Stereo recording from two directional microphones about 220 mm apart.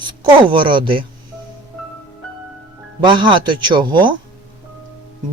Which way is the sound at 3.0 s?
20° right (ahead or behind).